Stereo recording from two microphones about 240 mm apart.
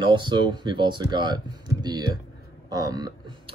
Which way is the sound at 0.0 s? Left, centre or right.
Centre.